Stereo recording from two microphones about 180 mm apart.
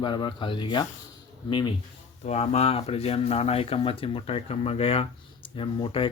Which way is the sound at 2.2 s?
35° left (ahead or behind).